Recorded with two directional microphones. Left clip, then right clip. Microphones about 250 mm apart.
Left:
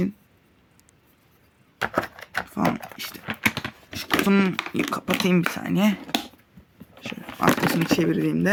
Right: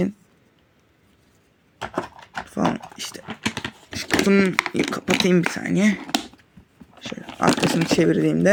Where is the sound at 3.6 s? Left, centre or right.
Centre.